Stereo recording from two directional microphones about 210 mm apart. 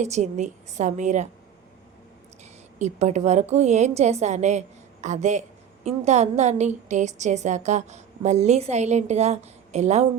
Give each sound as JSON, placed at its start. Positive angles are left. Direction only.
{"t": 0.0, "sound": "a woman's voice", "side_deg": -35}
{"t": 2.4, "sound": "a woman's voice", "side_deg": -35}